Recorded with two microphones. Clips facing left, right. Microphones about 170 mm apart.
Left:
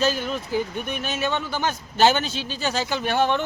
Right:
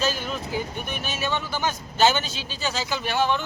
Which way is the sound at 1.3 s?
55° left (ahead or behind).